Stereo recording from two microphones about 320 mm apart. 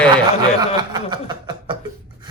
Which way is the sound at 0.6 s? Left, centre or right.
Centre.